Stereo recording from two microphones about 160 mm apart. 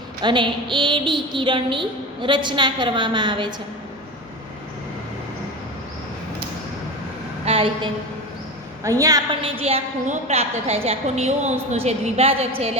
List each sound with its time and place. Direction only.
0.2 s a woman's voice: 30° right (ahead or behind)
7.4 s a sound: 35° right (ahead or behind)
8.8 s a woman's voice: 20° right (ahead or behind)
9.4 s a woman's voice: 35° right (ahead or behind)